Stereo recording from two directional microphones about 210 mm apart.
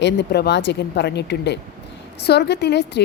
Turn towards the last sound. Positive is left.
turn(degrees=55)  # may be behind; listen again after turning